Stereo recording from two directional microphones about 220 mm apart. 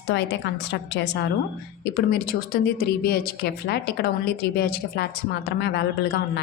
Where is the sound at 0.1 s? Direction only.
55° left (ahead or behind).